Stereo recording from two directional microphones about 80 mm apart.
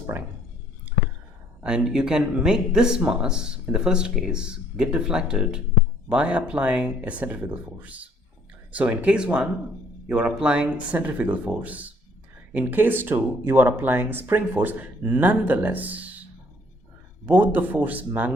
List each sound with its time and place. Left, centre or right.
1.6 s speech: centre
17.2 s speech: right